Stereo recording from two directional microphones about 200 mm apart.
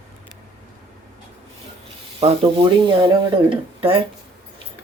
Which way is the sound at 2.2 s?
25° right (ahead or behind).